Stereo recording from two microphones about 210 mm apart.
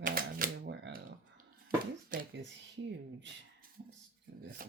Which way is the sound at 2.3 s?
60° right (ahead or behind).